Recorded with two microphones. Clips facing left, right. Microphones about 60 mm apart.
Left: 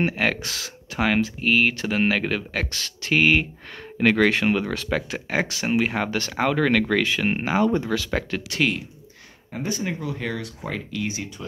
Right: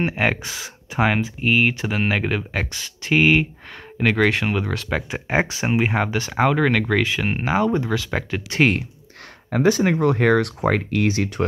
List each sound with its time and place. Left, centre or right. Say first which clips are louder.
0.0 s speech: right 2 dB; centre
5.3 s speech: right 3 dB; right
8.5 s speech: right 6 dB; right
9.5 s speech: right 10 dB; right